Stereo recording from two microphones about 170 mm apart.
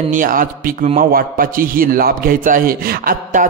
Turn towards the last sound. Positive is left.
turn(degrees=-60)  # may be behind; listen again after turning